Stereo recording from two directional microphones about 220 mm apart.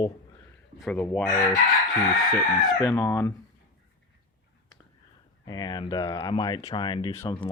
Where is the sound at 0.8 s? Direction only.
5° left (ahead or behind).